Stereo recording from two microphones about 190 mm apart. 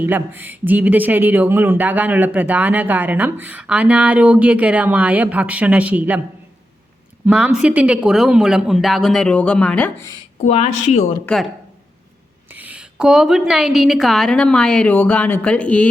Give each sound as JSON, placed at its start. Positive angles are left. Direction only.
{"t": 0.0, "sound": "speech", "side_deg": -10}
{"t": 7.3, "sound": "a woman's voice", "side_deg": -5}
{"t": 10.4, "sound": "speech", "side_deg": 35}
{"t": 11.3, "sound": "a woman's voice", "side_deg": 0}